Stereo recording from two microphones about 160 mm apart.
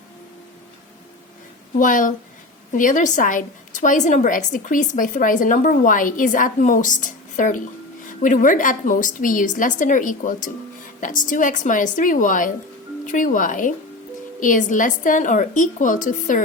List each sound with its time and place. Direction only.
1.8 s a woman's voice: 55° left (ahead or behind)